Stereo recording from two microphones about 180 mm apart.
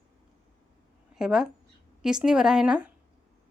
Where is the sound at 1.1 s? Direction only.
5° right (ahead or behind).